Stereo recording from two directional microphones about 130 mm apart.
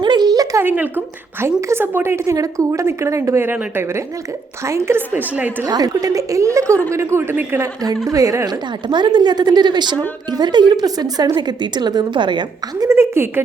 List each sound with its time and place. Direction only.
0.0 s a sound: 35° right (ahead or behind)
0.6 s a woman's voice: 15° right (ahead or behind)
5.6 s a woman's voice: 30° right (ahead or behind)
8.9 s a woman's voice: 35° right (ahead or behind)
12.9 s a woman's voice: 20° right (ahead or behind)